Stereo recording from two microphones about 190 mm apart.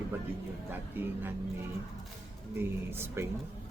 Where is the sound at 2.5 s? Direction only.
10° right (ahead or behind).